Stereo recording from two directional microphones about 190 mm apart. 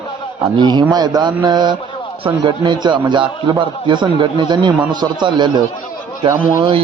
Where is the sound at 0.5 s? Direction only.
25° right (ahead or behind).